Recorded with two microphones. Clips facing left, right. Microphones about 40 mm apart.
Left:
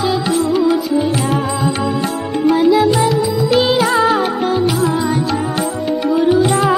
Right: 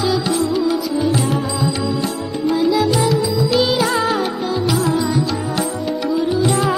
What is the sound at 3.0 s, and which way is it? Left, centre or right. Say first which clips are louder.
Music: left 2 dB; left.